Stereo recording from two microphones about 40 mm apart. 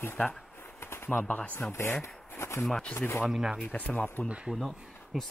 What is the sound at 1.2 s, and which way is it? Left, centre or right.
Speech, left.